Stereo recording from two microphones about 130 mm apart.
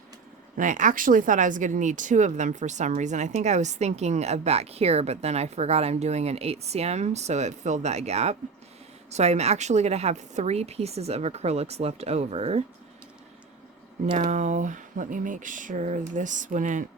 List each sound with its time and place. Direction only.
0.5 s speech: 75° right (ahead or behind); by 12.6 s 50° right (ahead or behind)
14.1 s speech: 65° right (ahead or behind)